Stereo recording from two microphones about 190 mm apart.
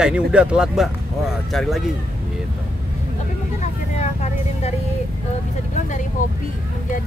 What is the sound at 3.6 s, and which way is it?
Vehicle, 35° left (ahead or behind).